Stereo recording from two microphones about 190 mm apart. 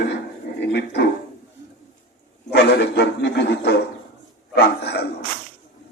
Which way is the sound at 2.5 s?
65° left (ahead or behind).